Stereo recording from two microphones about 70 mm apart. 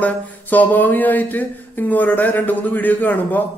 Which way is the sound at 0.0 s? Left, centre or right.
Left.